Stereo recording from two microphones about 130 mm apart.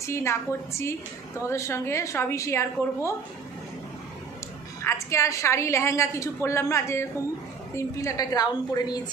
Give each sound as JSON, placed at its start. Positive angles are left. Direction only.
{"t": 0.0, "sound": "a woman's voice", "side_deg": 20}
{"t": 4.8, "sound": "a woman's voice", "side_deg": 20}